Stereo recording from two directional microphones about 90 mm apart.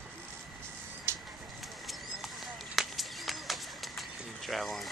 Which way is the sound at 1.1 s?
30° right (ahead or behind).